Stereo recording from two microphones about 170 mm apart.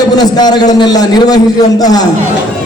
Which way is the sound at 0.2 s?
25° left (ahead or behind).